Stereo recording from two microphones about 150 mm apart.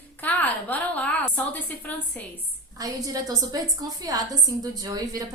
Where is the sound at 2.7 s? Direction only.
25° right (ahead or behind).